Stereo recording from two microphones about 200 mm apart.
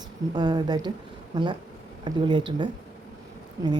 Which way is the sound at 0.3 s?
20° right (ahead or behind).